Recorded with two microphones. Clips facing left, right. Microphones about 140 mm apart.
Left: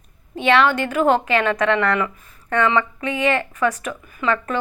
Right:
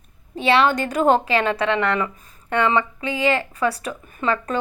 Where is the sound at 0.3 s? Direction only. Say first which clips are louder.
Left 1 dB; 35° right (ahead or behind).